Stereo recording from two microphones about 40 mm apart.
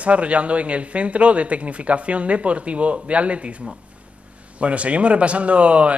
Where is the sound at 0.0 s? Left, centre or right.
Right.